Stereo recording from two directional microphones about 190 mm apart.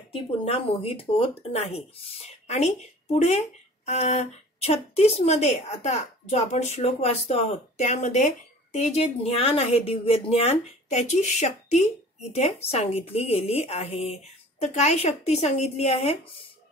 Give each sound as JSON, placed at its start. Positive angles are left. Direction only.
{"t": 0.1, "sound": "speech", "side_deg": 30}